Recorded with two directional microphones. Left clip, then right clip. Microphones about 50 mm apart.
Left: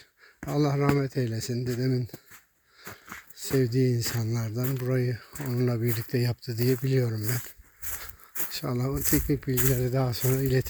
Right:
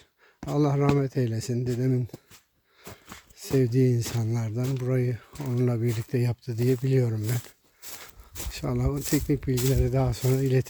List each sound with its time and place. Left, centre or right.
0.6 s speech: right
1.7 s speech: right
2.0 s speech: centre
2.9 s wheeze: centre
3.3 s speech: right
3.9 s speech: right
4.4 s speech: centre
5.4 s speech: centre
6.8 s speech: right
7.8 s a sound: centre
8.4 s a sound: right
8.7 s speech: centre
9.2 s speech: centre